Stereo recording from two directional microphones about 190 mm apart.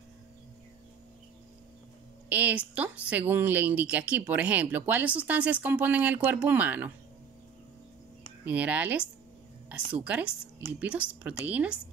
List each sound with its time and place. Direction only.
2.2 s a woman's voice: 10° right (ahead or behind)
8.5 s speech: 10° right (ahead or behind)